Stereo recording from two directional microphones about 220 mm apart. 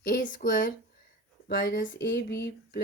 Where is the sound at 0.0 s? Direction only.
40° left (ahead or behind).